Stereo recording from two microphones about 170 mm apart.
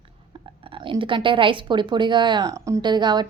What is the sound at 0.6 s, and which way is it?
A woman's voice, 30° right (ahead or behind).